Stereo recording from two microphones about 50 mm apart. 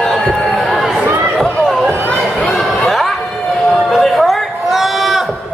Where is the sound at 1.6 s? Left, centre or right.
Centre.